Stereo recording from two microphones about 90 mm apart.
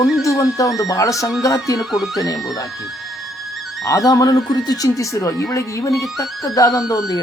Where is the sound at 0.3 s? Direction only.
40° left (ahead or behind).